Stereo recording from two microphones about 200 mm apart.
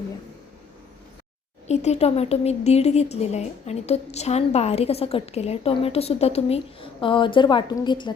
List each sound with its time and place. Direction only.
1.6 s speech: 35° left (ahead or behind)